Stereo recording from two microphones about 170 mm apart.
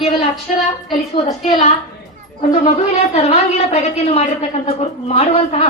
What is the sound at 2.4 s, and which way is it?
A woman's voice, 40° left (ahead or behind).